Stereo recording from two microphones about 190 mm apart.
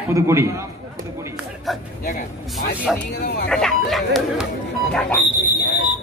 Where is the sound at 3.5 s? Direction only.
5° left (ahead or behind).